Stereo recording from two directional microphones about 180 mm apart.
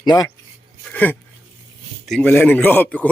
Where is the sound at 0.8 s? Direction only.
10° left (ahead or behind).